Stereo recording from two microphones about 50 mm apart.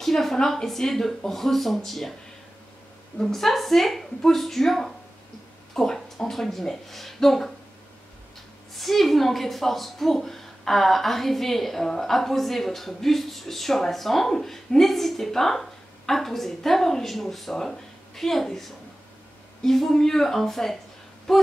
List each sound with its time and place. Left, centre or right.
0.0 s speech: centre
3.2 s speech: centre
8.7 s speech: centre